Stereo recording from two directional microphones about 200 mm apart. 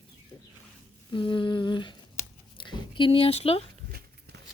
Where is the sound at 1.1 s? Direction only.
25° left (ahead or behind).